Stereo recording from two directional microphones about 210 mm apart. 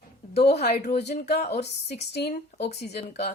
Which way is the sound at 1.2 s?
50° left (ahead or behind).